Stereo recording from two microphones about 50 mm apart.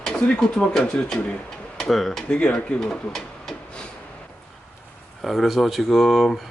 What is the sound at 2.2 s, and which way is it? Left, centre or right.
Speech, left.